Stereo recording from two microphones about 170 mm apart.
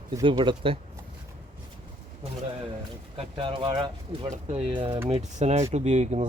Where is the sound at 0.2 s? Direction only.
30° right (ahead or behind).